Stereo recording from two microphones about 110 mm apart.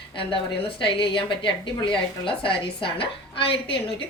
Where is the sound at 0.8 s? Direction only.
50° left (ahead or behind).